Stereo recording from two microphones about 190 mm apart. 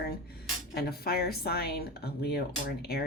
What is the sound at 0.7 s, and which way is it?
Speech, 55° left (ahead or behind).